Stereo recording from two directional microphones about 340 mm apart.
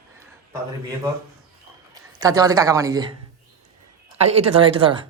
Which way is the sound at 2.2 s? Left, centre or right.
Centre.